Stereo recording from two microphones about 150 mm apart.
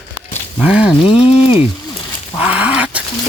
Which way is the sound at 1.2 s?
40° left (ahead or behind).